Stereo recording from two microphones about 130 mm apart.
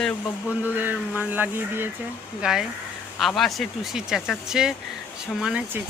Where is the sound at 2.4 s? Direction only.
5° right (ahead or behind).